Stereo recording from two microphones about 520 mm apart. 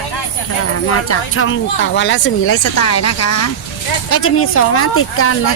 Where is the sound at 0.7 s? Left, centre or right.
Left.